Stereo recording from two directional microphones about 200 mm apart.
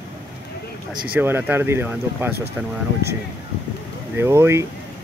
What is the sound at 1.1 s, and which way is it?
Speech, 10° right (ahead or behind).